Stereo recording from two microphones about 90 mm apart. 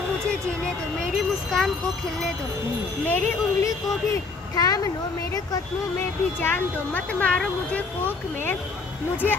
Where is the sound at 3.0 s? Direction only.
20° left (ahead or behind).